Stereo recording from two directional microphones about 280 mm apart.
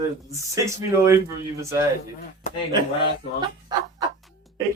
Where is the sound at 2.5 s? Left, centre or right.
Left.